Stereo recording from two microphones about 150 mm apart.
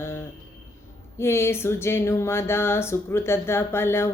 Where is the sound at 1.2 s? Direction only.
15° left (ahead or behind).